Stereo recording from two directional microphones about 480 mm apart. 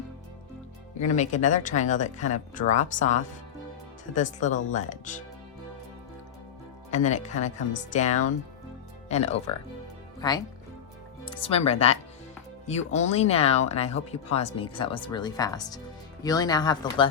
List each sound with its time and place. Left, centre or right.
1.1 s speech: centre
6.9 s speech: centre